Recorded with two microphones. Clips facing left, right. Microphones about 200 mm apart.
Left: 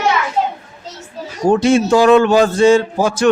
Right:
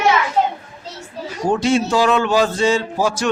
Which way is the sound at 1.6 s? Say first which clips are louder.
Left 5 dB; 50° left (ahead or behind).